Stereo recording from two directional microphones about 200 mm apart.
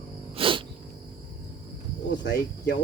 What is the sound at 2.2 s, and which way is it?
Speech, 50° left (ahead or behind).